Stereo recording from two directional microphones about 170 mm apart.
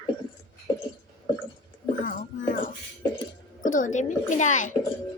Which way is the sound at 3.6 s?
50° left (ahead or behind).